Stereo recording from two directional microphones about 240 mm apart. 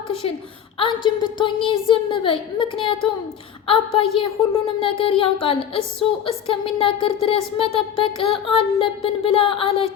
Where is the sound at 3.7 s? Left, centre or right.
Left.